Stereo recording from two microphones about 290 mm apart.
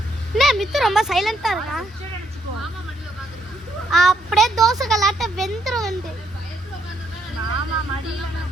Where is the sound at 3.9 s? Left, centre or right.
Centre.